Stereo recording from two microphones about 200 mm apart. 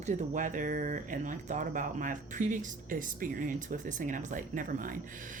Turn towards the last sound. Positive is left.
turn(degrees=-40)  # may be behind; listen again after turning